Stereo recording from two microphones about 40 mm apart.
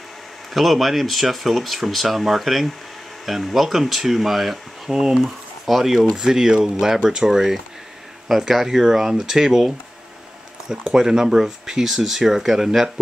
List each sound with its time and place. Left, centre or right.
0.5 s speech: centre; by 7.2 s right
7.2 s speech: centre
10.8 s speech: centre